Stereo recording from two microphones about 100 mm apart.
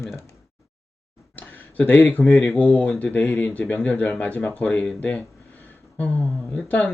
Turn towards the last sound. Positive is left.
turn(degrees=15)  # may be behind; listen again after turning